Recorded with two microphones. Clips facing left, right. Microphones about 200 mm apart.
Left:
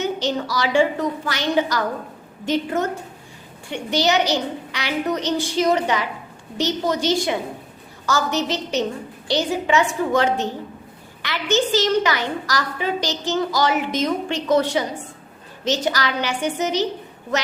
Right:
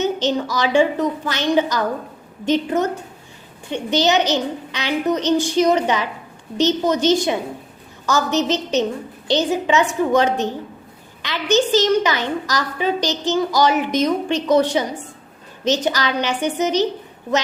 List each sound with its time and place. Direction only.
0.0 s a woman's voice: 20° right (ahead or behind)